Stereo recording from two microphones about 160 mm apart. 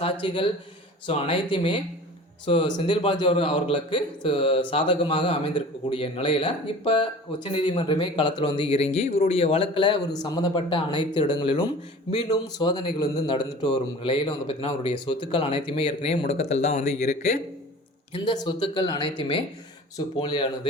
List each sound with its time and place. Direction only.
0.0 s a man's voice: 35° left (ahead or behind)
18.1 s a man's voice: 30° left (ahead or behind)